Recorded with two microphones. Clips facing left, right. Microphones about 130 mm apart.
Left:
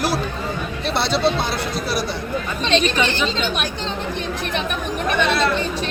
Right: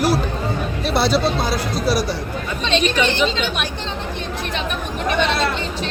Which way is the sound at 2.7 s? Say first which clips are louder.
Even; 40° left (ahead or behind).